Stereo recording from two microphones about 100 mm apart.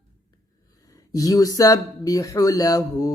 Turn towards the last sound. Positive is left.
turn(degrees=35)  # may be behind; listen again after turning